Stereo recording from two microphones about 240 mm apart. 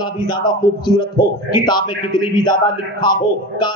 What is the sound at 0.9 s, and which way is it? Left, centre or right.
A man's voice, centre.